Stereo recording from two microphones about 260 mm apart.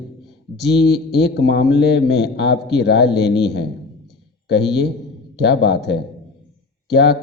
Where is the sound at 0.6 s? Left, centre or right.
Left.